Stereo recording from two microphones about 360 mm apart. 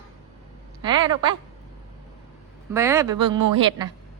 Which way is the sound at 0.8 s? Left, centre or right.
Centre.